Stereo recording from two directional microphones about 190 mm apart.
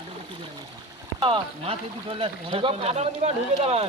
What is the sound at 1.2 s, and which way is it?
Speech, 30° right (ahead or behind).